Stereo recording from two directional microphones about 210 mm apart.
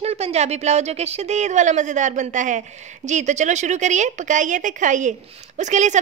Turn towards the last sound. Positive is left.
turn(degrees=-35)  # may be behind; listen again after turning